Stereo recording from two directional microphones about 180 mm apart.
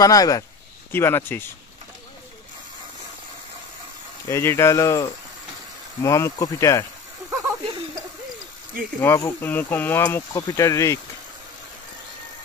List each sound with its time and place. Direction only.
0.0 s speech: 20° left (ahead or behind)
4.3 s speech: 15° left (ahead or behind)
7.2 s a sound: 15° right (ahead or behind)
9.0 s speech: 10° left (ahead or behind)